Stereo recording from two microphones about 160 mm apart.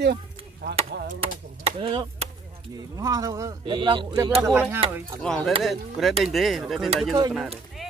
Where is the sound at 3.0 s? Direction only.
20° right (ahead or behind).